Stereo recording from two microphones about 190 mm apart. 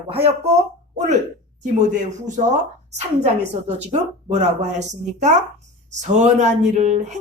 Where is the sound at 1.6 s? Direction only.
40° right (ahead or behind).